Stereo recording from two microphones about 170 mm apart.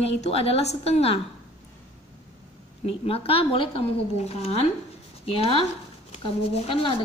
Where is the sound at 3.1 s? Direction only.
35° left (ahead or behind).